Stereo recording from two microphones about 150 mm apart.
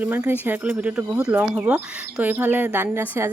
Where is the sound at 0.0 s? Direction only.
10° right (ahead or behind).